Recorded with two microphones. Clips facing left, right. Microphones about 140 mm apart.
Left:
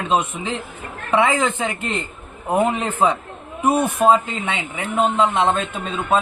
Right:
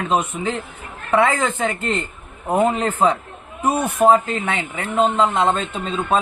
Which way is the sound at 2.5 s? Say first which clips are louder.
Right 1 dB; centre (ahead or behind).